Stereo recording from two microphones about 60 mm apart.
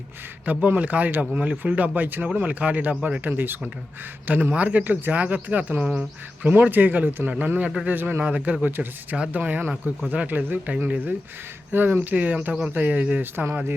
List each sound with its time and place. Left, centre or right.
0.4 s speech: right
3.2 s speech: right